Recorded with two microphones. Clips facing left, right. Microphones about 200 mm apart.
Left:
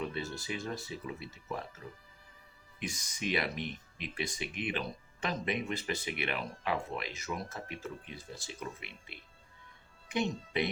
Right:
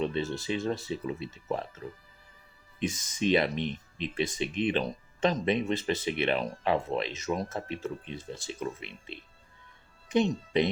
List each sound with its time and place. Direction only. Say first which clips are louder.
0.0 s speech: right 7 dB; 25° right (ahead or behind)
2.7 s speech: right 9 dB; 30° right (ahead or behind)
3.5 s speech: right 7 dB; 5° left (ahead or behind)
3.9 s speech: right 8 dB; 25° right (ahead or behind)
10.1 s speech: right 7 dB; 35° right (ahead or behind)